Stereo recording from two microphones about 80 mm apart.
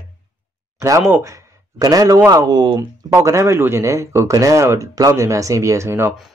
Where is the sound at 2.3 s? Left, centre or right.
Right.